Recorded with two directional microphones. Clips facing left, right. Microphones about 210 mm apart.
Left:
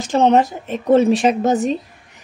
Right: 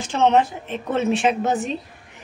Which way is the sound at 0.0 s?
40° left (ahead or behind).